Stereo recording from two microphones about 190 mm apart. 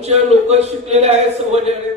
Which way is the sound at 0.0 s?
35° right (ahead or behind).